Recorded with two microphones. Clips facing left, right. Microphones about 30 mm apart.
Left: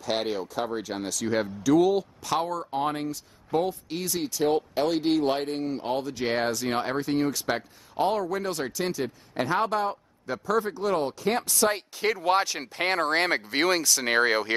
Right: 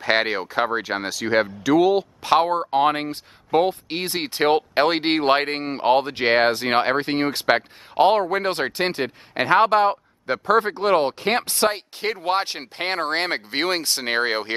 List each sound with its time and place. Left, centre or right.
0.0 s speech: right
1.6 s speech: right
2.2 s speech: right